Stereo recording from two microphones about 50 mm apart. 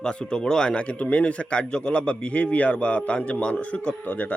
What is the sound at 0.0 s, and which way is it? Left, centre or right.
A man's voice, centre.